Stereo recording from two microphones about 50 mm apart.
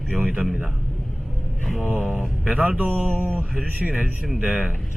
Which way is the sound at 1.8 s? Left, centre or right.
Right.